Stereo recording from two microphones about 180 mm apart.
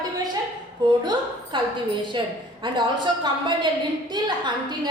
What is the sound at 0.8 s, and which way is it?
A woman's voice, 25° right (ahead or behind).